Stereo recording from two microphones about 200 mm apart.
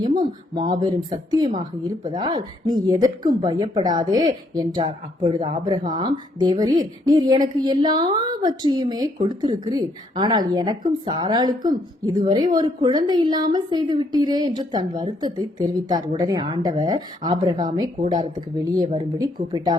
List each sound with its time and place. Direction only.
0.0 s a woman's voice: 25° right (ahead or behind)